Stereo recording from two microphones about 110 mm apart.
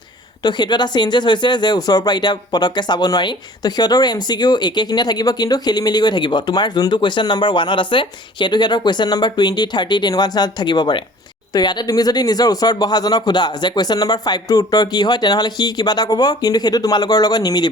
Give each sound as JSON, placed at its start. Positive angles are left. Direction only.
{"t": 0.4, "sound": "speech", "side_deg": 40}